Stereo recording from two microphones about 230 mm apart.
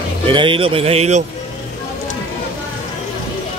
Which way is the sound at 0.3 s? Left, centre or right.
Right.